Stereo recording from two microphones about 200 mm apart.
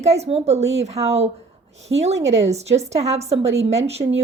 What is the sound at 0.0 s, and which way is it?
Speech, 30° right (ahead or behind).